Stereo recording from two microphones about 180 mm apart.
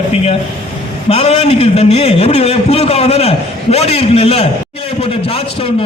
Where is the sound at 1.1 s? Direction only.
35° left (ahead or behind).